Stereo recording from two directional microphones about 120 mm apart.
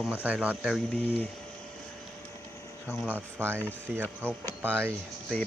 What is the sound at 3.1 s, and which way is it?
Speech, 15° right (ahead or behind).